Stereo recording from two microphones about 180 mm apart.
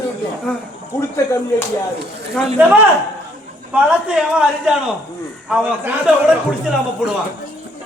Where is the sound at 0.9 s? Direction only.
15° left (ahead or behind).